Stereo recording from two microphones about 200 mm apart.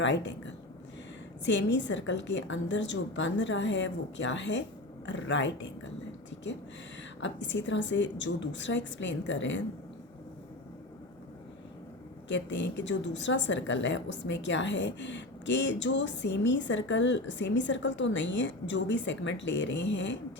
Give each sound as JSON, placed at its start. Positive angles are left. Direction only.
{"t": 0.0, "sound": "a woman's voice", "side_deg": 65}
{"t": 1.5, "sound": "a woman's voice", "side_deg": 65}
{"t": 7.2, "sound": "a woman's voice", "side_deg": 65}
{"t": 12.3, "sound": "a woman's voice", "side_deg": 65}